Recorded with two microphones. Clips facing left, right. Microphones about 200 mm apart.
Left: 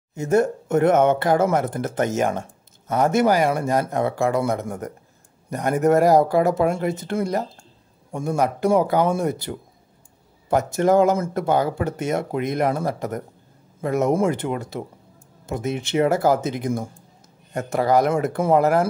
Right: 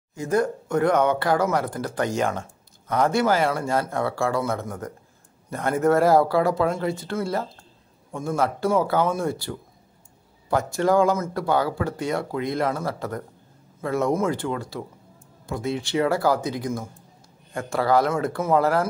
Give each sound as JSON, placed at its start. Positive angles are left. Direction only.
{"t": 0.1, "sound": "speech", "side_deg": 25}